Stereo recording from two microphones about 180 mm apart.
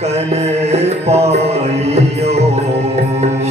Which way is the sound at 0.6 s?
35° right (ahead or behind).